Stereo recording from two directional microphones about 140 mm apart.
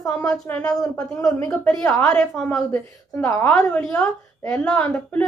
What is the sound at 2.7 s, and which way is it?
A woman's voice, 20° left (ahead or behind).